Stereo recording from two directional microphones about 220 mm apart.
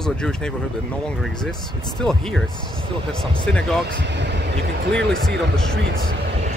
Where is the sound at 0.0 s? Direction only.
5° left (ahead or behind).